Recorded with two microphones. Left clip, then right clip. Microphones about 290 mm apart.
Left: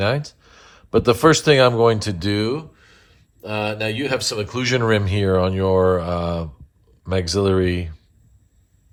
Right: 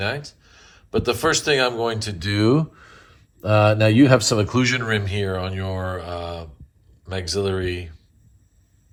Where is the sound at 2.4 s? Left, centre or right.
Centre.